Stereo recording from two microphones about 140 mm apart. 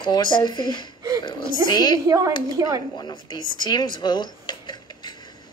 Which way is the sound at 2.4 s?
25° right (ahead or behind).